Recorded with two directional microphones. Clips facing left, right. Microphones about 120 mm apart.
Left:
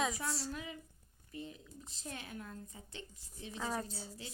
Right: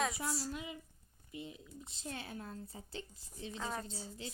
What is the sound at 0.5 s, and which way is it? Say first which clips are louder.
Speech: even; 20° right (ahead or behind).